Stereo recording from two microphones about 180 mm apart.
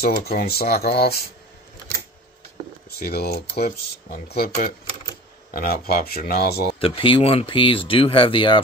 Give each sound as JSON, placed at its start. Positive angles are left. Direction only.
{"t": 0.0, "sound": "speech", "side_deg": 60}
{"t": 3.0, "sound": "speech", "side_deg": 60}
{"t": 6.8, "sound": "speech", "side_deg": 30}